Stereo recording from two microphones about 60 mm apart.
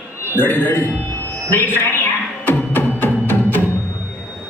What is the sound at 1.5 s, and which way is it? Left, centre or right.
Music, left.